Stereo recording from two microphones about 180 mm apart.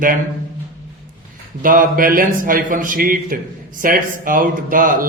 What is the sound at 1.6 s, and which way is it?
Speech, 50° right (ahead or behind).